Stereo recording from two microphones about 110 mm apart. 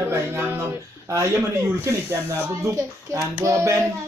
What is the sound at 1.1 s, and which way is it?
Speech, 25° right (ahead or behind).